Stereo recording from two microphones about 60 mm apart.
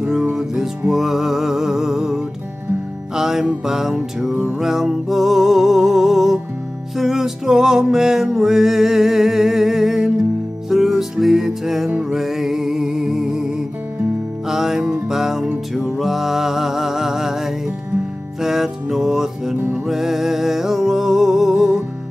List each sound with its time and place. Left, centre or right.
0.0 s music: centre
19.5 s music: right
19.9 s music: centre